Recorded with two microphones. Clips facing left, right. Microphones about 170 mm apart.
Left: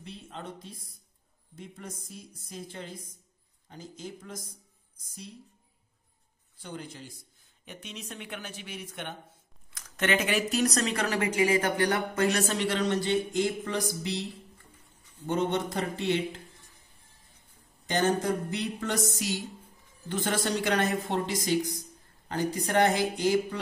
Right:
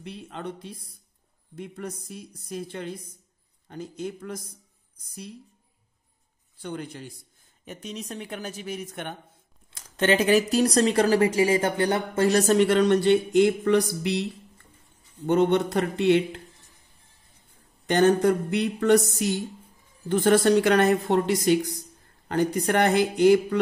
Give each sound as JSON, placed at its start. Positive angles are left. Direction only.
{"t": 0.0, "sound": "a woman's voice", "side_deg": -65}
{"t": 6.6, "sound": "a woman's voice", "side_deg": -60}
{"t": 7.6, "sound": "speech", "side_deg": -40}
{"t": 9.7, "sound": "speech", "side_deg": -30}
{"t": 15.2, "sound": "a woman's voice", "side_deg": -60}
{"t": 17.8, "sound": "a woman's voice", "side_deg": -60}
{"t": 19.1, "sound": "a woman's voice", "side_deg": -50}